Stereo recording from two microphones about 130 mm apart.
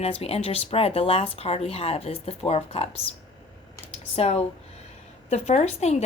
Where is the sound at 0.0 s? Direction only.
50° left (ahead or behind).